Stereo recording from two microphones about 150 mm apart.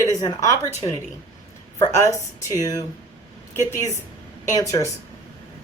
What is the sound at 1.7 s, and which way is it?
Speech, 25° left (ahead or behind).